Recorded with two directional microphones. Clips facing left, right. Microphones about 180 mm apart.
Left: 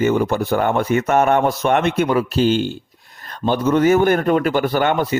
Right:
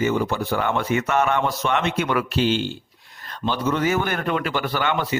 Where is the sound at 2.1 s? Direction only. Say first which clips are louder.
Left 5 dB; 40° left (ahead or behind).